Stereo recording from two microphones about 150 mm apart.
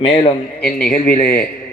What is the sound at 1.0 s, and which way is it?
Speech, 70° left (ahead or behind).